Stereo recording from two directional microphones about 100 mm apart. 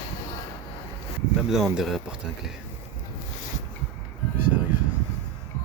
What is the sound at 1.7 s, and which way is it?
Speech, 5° right (ahead or behind).